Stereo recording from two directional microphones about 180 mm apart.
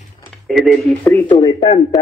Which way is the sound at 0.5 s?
Centre (ahead or behind).